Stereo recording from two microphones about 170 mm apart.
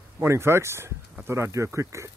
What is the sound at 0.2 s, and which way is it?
Speech, 15° right (ahead or behind).